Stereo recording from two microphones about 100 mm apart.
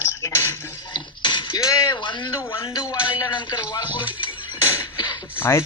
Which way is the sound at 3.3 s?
50° left (ahead or behind).